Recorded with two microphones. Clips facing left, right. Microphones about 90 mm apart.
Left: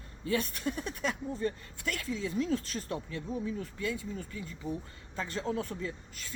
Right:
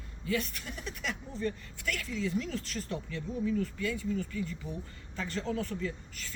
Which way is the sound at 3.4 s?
20° left (ahead or behind).